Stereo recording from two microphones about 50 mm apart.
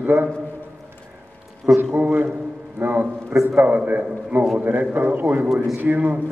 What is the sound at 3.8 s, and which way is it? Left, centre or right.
A man's voice, right.